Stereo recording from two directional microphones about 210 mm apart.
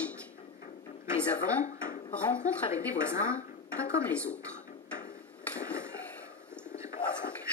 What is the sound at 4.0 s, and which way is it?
Speech, 5° left (ahead or behind).